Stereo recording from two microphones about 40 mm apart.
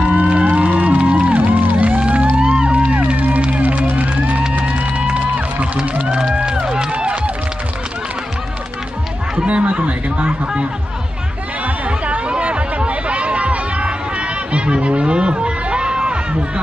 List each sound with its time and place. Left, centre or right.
0.0 s music: right
1.3 s music: right
2.0 s music: right
6.3 s music: right
6.9 s run: right
9.5 s chatter: right
12.3 s chatter: right